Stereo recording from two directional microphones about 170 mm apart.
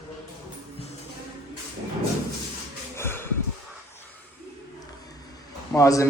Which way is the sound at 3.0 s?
15° left (ahead or behind).